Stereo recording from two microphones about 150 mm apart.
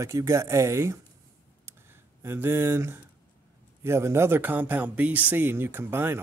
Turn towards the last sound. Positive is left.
turn(degrees=-15)  # may be behind; listen again after turning